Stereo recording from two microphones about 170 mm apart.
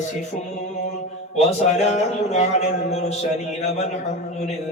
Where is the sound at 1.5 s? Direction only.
40° left (ahead or behind).